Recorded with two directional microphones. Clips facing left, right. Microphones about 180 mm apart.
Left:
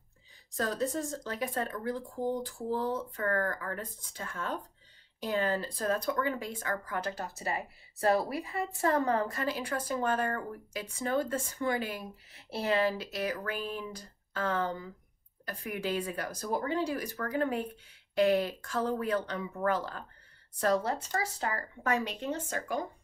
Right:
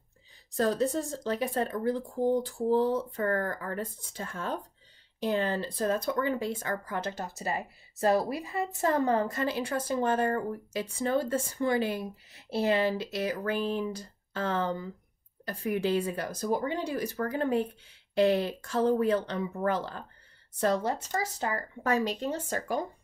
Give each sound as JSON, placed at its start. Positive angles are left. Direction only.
{"t": 1.2, "sound": "speech", "side_deg": -30}